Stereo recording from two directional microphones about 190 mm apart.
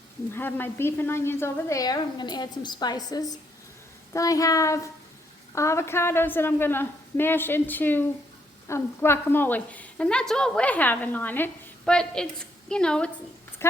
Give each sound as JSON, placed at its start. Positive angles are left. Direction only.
{"t": 0.3, "sound": "a woman's voice", "side_deg": 10}